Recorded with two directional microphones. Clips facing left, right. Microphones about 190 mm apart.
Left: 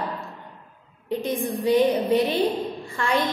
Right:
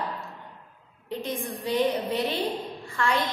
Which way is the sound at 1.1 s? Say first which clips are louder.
Left 6 dB; 15° left (ahead or behind).